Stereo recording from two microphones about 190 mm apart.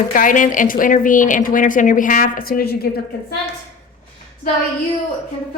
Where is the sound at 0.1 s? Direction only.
45° left (ahead or behind).